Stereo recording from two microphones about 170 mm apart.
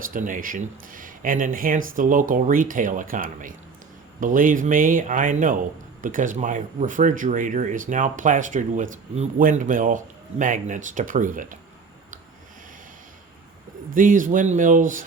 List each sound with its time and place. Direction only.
0.0 s speech: 50° right (ahead or behind)
13.9 s speech: 50° right (ahead or behind)